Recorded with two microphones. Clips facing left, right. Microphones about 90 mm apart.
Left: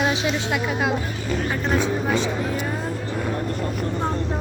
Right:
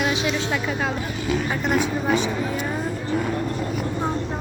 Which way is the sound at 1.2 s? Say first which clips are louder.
Right 1 dB; 5° right (ahead or behind).